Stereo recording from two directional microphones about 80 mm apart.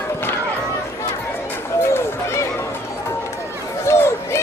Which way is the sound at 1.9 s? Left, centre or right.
Left.